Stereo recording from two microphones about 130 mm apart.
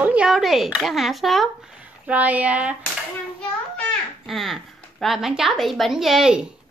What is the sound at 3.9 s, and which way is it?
A child's voice, centre (ahead or behind).